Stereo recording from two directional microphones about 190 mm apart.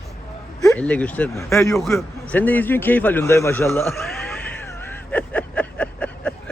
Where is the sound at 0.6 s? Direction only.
10° left (ahead or behind).